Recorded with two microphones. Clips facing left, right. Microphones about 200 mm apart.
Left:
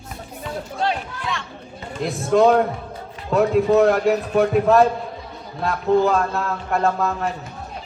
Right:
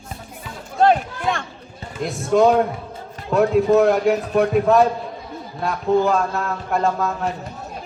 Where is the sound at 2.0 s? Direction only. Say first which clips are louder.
Even; centre (ahead or behind).